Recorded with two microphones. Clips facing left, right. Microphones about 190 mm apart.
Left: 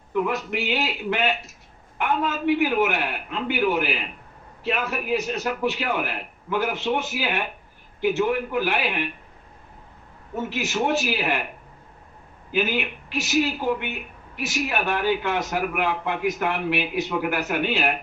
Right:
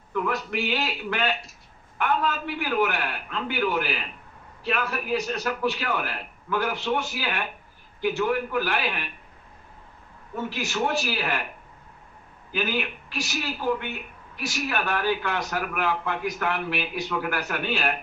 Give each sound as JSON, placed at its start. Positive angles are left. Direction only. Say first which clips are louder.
{"t": 0.1, "sound": "a man's voice", "louder": "left 3 dB", "side_deg": 20}
{"t": 10.5, "sound": "a man's voice", "louder": "left 3 dB", "side_deg": 20}
{"t": 12.5, "sound": "a man's voice", "louder": "left 3 dB", "side_deg": 20}